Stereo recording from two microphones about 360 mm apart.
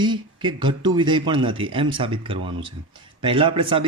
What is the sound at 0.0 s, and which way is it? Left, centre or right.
Speech, centre.